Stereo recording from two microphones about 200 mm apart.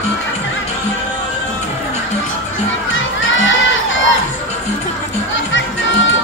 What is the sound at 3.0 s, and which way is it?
Crowd, 75° left (ahead or behind).